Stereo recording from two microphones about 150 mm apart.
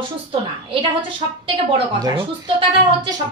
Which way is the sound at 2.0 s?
30° right (ahead or behind).